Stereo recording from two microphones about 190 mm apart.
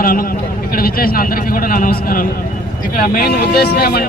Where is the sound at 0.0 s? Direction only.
50° left (ahead or behind).